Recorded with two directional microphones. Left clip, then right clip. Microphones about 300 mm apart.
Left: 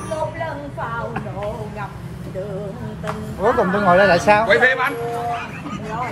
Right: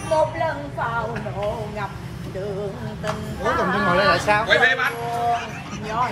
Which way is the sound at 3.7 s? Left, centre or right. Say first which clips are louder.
Left 5 dB; left.